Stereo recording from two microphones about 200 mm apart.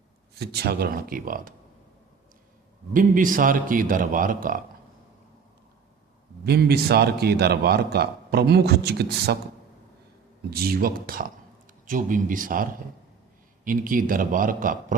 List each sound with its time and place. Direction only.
0.3 s a man's voice: 50° right (ahead or behind)
2.9 s a man's voice: 45° right (ahead or behind)
6.4 s a man's voice: 50° right (ahead or behind)
10.5 s a man's voice: 50° right (ahead or behind)
13.7 s a man's voice: 45° right (ahead or behind)